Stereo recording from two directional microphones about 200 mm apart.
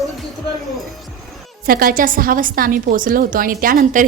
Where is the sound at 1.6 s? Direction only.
45° right (ahead or behind).